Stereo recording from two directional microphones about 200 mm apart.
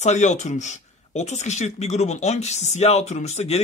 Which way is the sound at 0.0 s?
35° left (ahead or behind).